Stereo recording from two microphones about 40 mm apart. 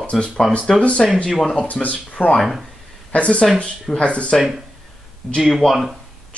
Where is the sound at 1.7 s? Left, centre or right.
Left.